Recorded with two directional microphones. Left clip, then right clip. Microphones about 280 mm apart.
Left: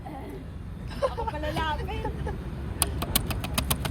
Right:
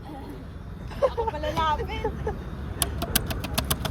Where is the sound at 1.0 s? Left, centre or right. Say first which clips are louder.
Right 4 dB; right.